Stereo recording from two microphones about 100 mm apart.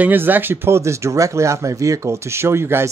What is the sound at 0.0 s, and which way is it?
Speech, 20° right (ahead or behind).